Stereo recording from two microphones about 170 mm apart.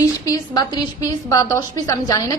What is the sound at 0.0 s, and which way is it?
A woman's voice, 20° left (ahead or behind).